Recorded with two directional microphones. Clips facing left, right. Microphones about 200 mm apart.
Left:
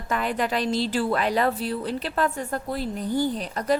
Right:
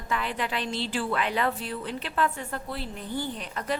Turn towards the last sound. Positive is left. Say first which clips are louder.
# left 7 dB
turn(degrees=40)  # may be behind; listen again after turning